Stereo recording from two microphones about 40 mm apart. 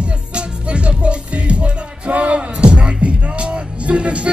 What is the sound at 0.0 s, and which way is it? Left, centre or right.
Music, right.